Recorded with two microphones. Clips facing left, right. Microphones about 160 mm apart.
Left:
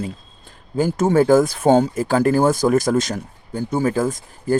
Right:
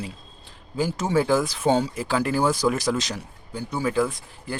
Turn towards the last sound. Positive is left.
turn(degrees=45)  # may be behind; listen again after turning